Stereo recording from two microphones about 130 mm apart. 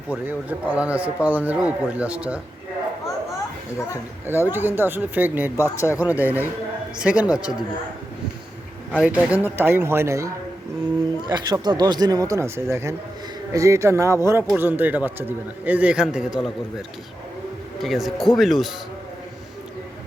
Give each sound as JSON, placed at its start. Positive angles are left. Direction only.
{"t": 0.3, "sound": "speech", "side_deg": -10}
{"t": 4.3, "sound": "speech", "side_deg": -15}
{"t": 5.5, "sound": "speech", "side_deg": 20}
{"t": 6.0, "sound": "speech", "side_deg": -10}
{"t": 9.0, "sound": "speech", "side_deg": -10}
{"t": 11.2, "sound": "speech", "side_deg": -35}
{"t": 17.8, "sound": "speech", "side_deg": 0}